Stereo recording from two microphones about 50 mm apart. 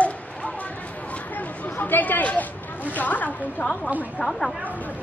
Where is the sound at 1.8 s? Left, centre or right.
Left.